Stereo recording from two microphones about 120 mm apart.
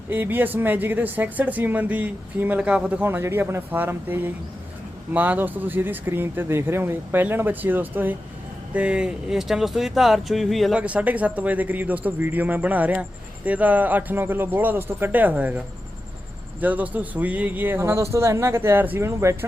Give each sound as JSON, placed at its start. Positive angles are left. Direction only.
{"t": 0.1, "sound": "speech", "side_deg": -15}
{"t": 10.8, "sound": "speech", "side_deg": -10}